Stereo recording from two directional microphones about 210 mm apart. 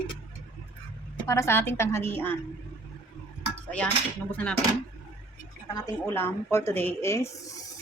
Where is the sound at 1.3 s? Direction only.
10° left (ahead or behind).